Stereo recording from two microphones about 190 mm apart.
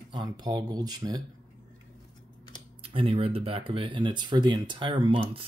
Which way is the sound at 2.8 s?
30° right (ahead or behind).